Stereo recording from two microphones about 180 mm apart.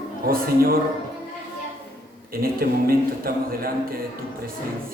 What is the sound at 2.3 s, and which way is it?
A man's voice, 55° right (ahead or behind).